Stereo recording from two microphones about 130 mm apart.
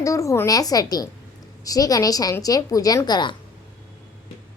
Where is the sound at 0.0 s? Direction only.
25° left (ahead or behind).